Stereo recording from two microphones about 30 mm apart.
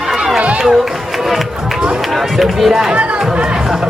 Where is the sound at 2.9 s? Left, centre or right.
Right.